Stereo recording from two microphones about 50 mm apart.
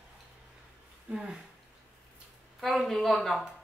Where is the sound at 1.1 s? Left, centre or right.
Centre.